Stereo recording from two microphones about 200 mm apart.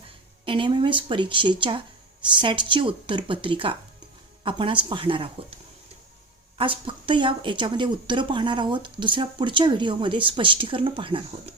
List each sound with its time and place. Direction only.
0.4 s speech: 25° right (ahead or behind)
6.6 s speech: 25° right (ahead or behind)